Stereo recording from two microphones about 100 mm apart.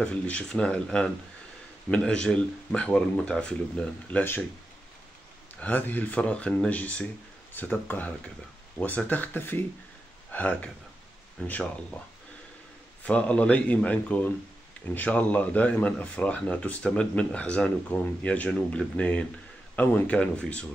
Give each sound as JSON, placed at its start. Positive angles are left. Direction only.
{"t": 0.0, "sound": "a man's voice", "side_deg": 10}
{"t": 5.6, "sound": "a man's voice", "side_deg": 15}
{"t": 13.0, "sound": "a man's voice", "side_deg": 10}